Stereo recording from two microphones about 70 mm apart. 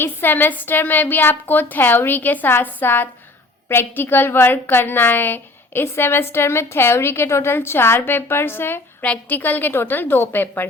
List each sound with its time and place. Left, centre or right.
0.0 s a woman's voice: left